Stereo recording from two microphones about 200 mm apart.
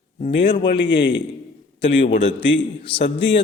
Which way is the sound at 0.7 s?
60° left (ahead or behind).